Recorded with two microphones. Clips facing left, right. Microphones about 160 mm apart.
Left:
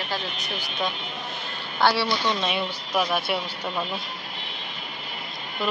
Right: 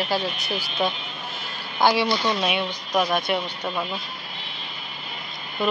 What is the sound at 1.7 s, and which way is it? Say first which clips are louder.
Speech: right 2 dB; 15° right (ahead or behind).